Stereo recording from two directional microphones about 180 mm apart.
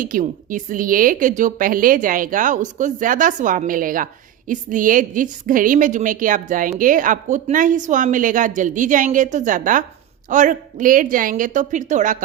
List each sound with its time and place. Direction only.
0.0 s a woman's voice: 50° right (ahead or behind)